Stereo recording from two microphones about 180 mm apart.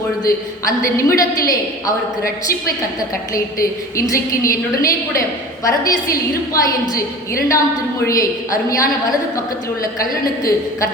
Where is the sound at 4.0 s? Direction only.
15° left (ahead or behind).